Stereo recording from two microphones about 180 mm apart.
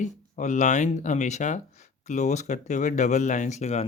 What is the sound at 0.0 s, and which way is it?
Speech, 40° left (ahead or behind).